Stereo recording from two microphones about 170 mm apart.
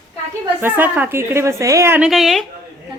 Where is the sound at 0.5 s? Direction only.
10° right (ahead or behind).